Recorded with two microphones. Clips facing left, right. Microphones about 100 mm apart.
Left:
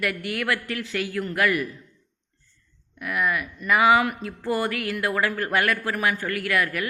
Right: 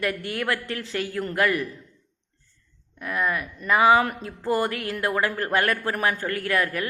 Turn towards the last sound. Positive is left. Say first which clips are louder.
# even
turn(degrees=-35)  # may be behind; listen again after turning